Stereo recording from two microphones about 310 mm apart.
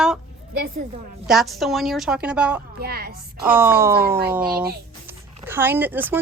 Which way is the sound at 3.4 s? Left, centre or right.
Centre.